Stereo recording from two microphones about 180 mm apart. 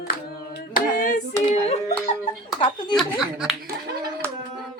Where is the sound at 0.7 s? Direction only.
50° left (ahead or behind).